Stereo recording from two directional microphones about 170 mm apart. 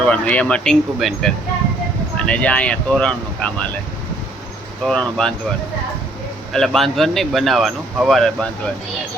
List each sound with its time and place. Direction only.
0.0 s speech: 5° left (ahead or behind)
4.9 s speech: 5° left (ahead or behind)
6.5 s speech: centre (ahead or behind)